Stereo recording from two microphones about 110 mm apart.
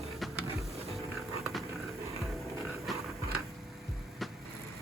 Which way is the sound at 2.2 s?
Centre (ahead or behind).